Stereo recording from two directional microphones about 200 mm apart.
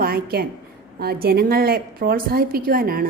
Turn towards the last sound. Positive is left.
turn(degrees=-45)  # may be behind; listen again after turning